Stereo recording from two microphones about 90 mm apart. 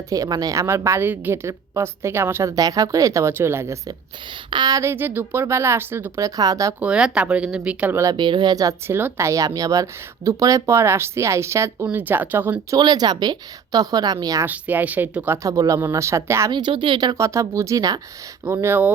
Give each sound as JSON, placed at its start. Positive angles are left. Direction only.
{"t": 0.1, "sound": "a woman's voice", "side_deg": -40}
{"t": 4.5, "sound": "a woman's voice", "side_deg": -50}
{"t": 4.8, "sound": "speech", "side_deg": -25}
{"t": 6.2, "sound": "a woman's voice", "side_deg": -45}
{"t": 6.7, "sound": "speech", "side_deg": -10}
{"t": 8.1, "sound": "a woman's voice", "side_deg": -55}
{"t": 8.9, "sound": "a woman's voice", "side_deg": -25}
{"t": 11.9, "sound": "speech", "side_deg": -20}
{"t": 12.7, "sound": "a woman's voice", "side_deg": -50}
{"t": 14.4, "sound": "speech", "side_deg": -20}
{"t": 15.4, "sound": "a woman's voice", "side_deg": -40}
{"t": 16.5, "sound": "speech", "side_deg": -60}
{"t": 17.2, "sound": "a woman's voice", "side_deg": -35}
{"t": 18.4, "sound": "speech", "side_deg": -30}